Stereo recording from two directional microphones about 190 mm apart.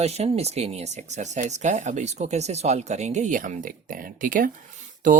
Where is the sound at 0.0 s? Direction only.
35° right (ahead or behind).